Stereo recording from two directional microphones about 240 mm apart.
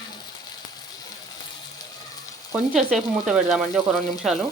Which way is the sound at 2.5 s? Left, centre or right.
Centre.